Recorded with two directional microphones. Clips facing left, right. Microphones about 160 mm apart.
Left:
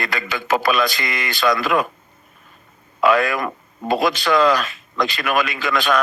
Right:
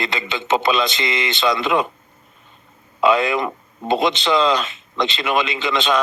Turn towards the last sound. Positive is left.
turn(degrees=-20)  # may be behind; listen again after turning